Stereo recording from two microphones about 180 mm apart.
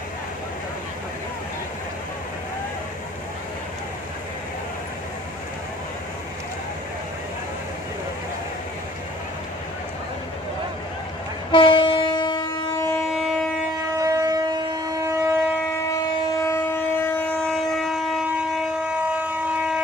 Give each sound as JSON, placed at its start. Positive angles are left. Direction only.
{"t": 11.5, "sound": "train", "side_deg": 25}
{"t": 13.0, "sound": "train", "side_deg": 0}
{"t": 13.9, "sound": "civil defense siren", "side_deg": -20}
{"t": 15.7, "sound": "train", "side_deg": 15}